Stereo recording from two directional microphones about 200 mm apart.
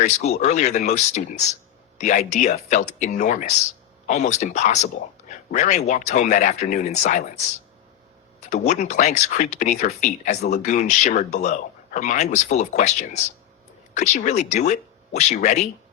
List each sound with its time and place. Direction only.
0.0 s speech: 35° left (ahead or behind)
8.4 s speech: 35° left (ahead or behind)